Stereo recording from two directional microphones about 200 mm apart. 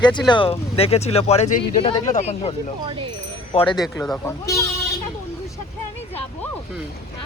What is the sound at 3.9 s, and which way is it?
Speech, 5° left (ahead or behind).